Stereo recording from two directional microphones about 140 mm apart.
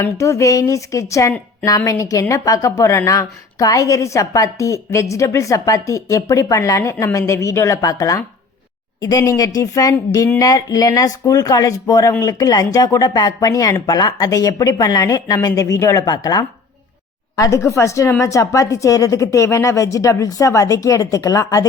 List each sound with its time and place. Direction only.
0.0 s a woman's voice: 20° left (ahead or behind)